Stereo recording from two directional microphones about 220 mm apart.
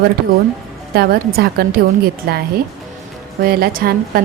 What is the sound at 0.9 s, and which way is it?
A woman's voice, 45° right (ahead or behind).